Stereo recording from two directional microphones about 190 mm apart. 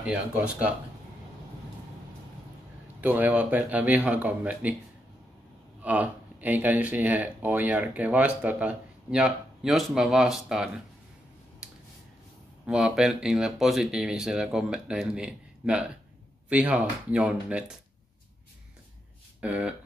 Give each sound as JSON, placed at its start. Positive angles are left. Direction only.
{"t": 0.0, "sound": "speech", "side_deg": -5}
{"t": 3.0, "sound": "speech", "side_deg": -10}
{"t": 5.8, "sound": "speech", "side_deg": -10}
{"t": 12.6, "sound": "speech", "side_deg": -5}
{"t": 19.4, "sound": "speech", "side_deg": -5}